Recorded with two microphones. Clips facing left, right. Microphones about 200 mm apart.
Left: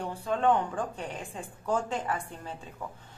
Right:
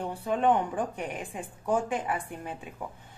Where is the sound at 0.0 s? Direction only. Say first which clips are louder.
Right 1 dB; 15° right (ahead or behind).